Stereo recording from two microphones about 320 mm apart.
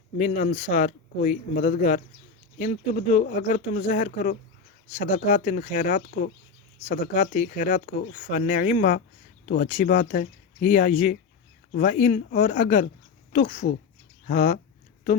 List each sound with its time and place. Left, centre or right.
0.2 s speech: left